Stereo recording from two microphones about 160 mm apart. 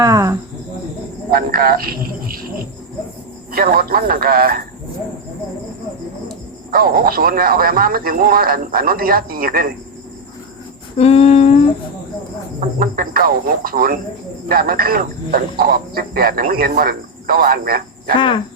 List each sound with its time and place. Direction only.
0.0 s speech: 20° right (ahead or behind)
1.3 s speech: 65° right (ahead or behind)
3.5 s a man's voice: 65° right (ahead or behind)
6.7 s a man's voice: 65° right (ahead or behind)
10.9 s humming: 40° left (ahead or behind)
12.5 s a man's voice: 65° right (ahead or behind)